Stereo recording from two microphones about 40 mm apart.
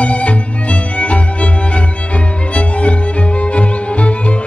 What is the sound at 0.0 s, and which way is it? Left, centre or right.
Music, left.